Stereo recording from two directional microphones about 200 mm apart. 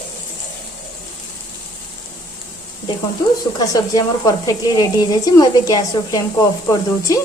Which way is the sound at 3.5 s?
20° left (ahead or behind).